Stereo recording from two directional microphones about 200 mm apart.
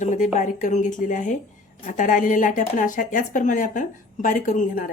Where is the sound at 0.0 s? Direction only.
35° left (ahead or behind).